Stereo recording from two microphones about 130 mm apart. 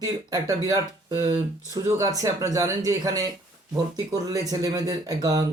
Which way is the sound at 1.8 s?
25° right (ahead or behind).